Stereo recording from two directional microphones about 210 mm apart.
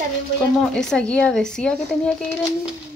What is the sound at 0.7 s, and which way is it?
Speech, 5° left (ahead or behind).